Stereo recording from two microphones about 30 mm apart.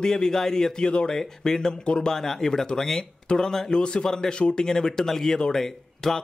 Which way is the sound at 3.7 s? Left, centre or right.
Left.